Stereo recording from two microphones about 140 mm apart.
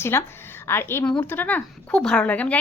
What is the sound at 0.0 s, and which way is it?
Speech, 15° left (ahead or behind).